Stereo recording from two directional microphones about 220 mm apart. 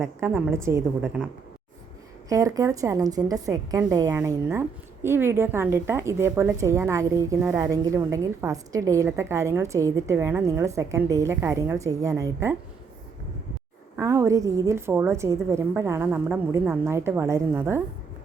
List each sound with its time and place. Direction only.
0.0 s a woman's voice: 10° right (ahead or behind)
2.3 s a woman's voice: 15° right (ahead or behind)
13.9 s a woman's voice: 15° right (ahead or behind)